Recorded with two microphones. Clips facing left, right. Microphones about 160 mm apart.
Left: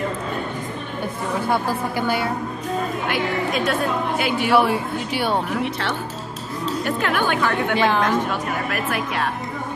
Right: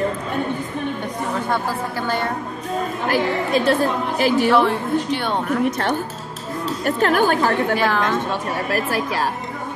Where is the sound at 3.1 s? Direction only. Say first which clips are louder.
Right 6 dB; 30° right (ahead or behind).